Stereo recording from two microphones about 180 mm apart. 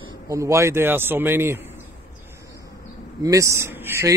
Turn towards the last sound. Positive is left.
turn(degrees=-15)  # may be behind; listen again after turning